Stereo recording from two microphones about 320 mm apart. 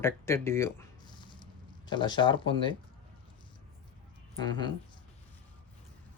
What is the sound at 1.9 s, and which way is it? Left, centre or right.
Speech, centre.